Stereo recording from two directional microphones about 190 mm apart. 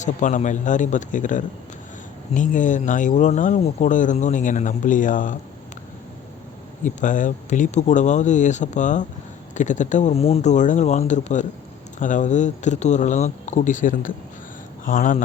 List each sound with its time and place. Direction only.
0.0 s speech: 40° left (ahead or behind)
6.8 s speech: 40° left (ahead or behind)